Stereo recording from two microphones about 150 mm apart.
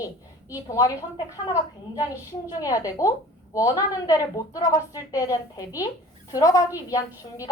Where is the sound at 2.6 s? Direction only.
25° left (ahead or behind).